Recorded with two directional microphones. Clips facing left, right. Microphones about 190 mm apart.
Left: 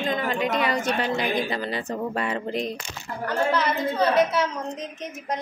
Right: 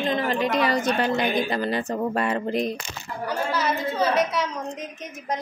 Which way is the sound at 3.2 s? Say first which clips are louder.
Left 2 dB; 10° right (ahead or behind).